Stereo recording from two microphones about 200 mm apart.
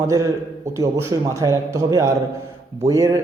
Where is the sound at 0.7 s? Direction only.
15° right (ahead or behind).